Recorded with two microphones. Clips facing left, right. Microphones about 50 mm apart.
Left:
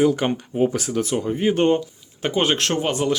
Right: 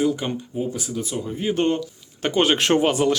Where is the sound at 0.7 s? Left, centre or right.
Left.